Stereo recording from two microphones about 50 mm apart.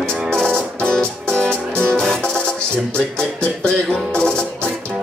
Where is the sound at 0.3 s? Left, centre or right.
Centre.